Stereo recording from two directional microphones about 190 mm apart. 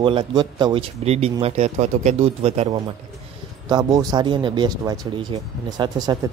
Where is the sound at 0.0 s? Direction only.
25° right (ahead or behind).